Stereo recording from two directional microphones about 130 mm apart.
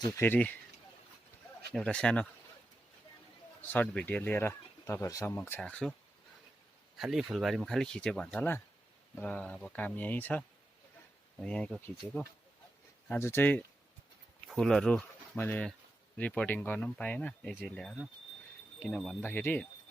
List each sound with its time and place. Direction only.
0.2 s speech: 15° left (ahead or behind)
1.7 s speech: 5° left (ahead or behind)
3.7 s speech: 15° left (ahead or behind)
5.6 s speech: 10° left (ahead or behind)
6.9 s speech: centre (ahead or behind)
13.1 s speech: 20° left (ahead or behind)
14.4 s speech: 5° left (ahead or behind)
19.2 s speech: 15° left (ahead or behind)